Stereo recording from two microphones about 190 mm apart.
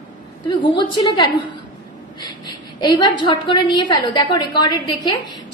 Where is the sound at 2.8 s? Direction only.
20° left (ahead or behind).